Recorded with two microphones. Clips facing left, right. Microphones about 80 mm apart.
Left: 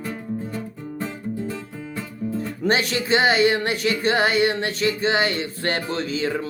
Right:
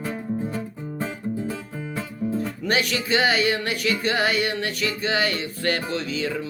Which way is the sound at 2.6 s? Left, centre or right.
Left.